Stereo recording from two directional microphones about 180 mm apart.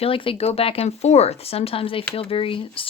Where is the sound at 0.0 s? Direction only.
30° left (ahead or behind).